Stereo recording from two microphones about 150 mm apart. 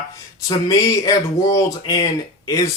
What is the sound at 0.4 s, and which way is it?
Speech, 25° left (ahead or behind).